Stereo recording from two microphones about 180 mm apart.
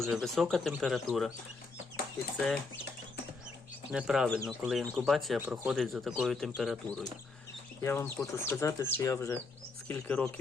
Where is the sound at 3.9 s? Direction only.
5° right (ahead or behind).